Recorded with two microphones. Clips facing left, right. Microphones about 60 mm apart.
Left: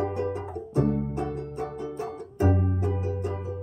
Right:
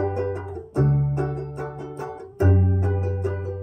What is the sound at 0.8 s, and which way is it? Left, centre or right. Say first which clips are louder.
Music: right 3 dB; right.